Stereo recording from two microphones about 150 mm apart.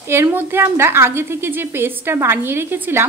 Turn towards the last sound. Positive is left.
turn(degrees=-15)  # may be behind; listen again after turning